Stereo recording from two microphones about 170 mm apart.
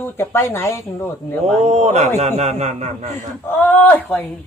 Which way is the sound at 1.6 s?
40° right (ahead or behind).